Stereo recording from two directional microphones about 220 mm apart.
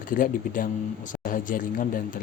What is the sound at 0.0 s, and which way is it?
Speech, 40° left (ahead or behind).